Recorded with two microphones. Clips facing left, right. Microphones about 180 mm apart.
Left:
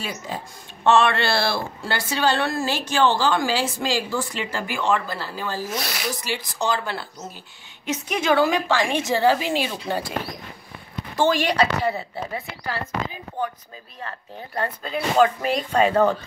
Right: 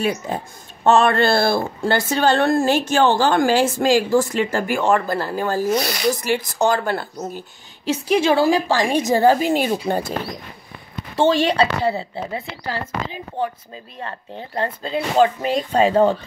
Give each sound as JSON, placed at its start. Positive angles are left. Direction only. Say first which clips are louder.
{"t": 0.0, "sound": "speech", "louder": "right 9 dB", "side_deg": -55}
{"t": 0.8, "sound": "a woman's voice", "louder": "right 4 dB", "side_deg": -40}
{"t": 5.7, "sound": "speech", "louder": "right 9 dB", "side_deg": 0}
{"t": 6.2, "sound": "a woman's voice", "louder": "right 7 dB", "side_deg": -50}
{"t": 7.8, "sound": "a woman's voice", "louder": "right 7 dB", "side_deg": -30}
{"t": 11.1, "sound": "a woman's voice", "louder": "right 3 dB", "side_deg": -25}